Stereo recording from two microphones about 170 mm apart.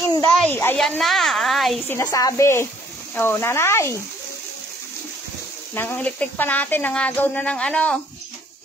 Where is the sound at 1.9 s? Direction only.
20° left (ahead or behind).